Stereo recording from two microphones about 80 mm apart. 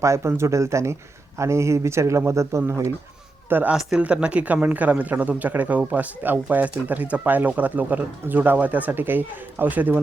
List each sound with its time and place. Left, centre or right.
0.0 s speech: right
3.5 s speech: centre